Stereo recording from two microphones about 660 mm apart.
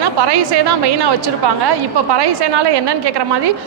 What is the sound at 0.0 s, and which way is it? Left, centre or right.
A woman's voice, right.